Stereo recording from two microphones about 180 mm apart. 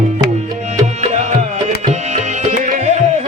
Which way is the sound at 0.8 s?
40° right (ahead or behind).